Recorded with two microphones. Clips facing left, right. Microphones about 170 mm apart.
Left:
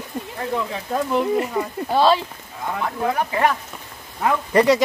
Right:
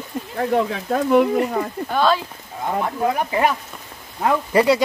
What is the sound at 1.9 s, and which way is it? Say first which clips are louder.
Speech: left 2 dB; 30° left (ahead or behind).